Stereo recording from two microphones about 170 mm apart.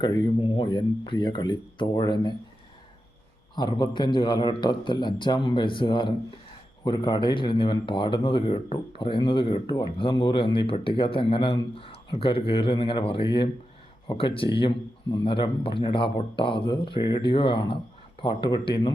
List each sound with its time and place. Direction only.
0.0 s a man's voice: 30° left (ahead or behind)
3.5 s a man's voice: 25° left (ahead or behind)